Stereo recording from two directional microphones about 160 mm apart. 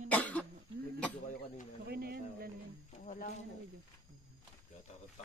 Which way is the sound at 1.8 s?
75° right (ahead or behind).